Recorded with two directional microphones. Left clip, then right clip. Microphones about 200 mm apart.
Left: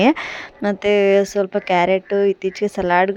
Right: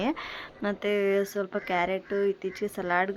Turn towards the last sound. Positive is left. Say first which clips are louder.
# left 11 dB
turn(degrees=40)  # may be behind; listen again after turning